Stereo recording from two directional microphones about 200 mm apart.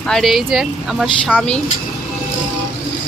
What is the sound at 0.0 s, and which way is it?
Speech, centre (ahead or behind).